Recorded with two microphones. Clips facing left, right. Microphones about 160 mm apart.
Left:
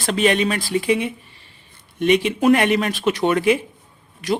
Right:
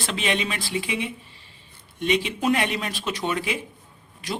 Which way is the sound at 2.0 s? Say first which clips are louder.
Left 7 dB; 60° left (ahead or behind).